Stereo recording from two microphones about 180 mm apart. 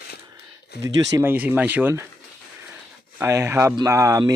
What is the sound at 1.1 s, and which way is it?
Speech, 10° right (ahead or behind).